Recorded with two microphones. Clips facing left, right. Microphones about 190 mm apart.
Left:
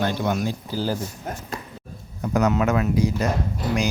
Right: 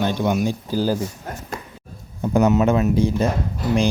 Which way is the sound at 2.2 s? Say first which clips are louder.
Right 4 dB; 25° right (ahead or behind).